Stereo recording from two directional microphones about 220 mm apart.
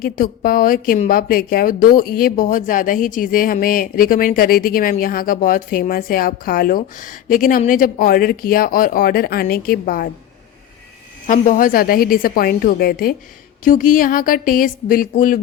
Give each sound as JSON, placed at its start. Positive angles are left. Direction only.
{"t": 0.0, "sound": "a woman's voice", "side_deg": 40}
{"t": 11.3, "sound": "a woman's voice", "side_deg": 40}